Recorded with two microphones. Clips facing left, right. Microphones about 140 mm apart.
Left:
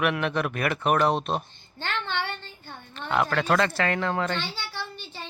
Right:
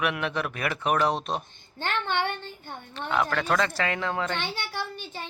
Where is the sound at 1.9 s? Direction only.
10° right (ahead or behind).